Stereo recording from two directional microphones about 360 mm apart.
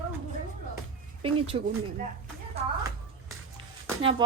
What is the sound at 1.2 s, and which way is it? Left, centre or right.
Speech, centre.